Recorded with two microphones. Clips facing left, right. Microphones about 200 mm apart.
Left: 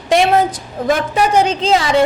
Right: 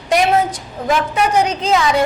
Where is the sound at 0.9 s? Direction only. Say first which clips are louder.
Left 2 dB; 30° left (ahead or behind).